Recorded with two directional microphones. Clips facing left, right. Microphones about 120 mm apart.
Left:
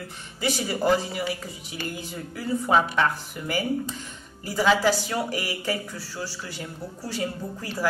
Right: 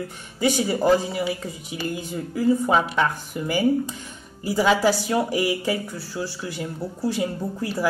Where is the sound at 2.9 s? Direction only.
15° right (ahead or behind).